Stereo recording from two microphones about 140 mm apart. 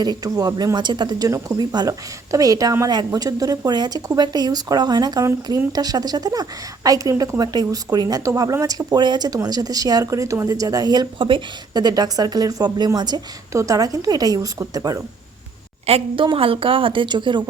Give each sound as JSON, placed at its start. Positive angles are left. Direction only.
{"t": 0.0, "sound": "speech", "side_deg": -30}
{"t": 15.9, "sound": "a woman's voice", "side_deg": -45}